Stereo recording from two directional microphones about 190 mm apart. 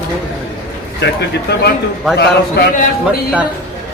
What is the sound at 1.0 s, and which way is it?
Speech, 65° left (ahead or behind).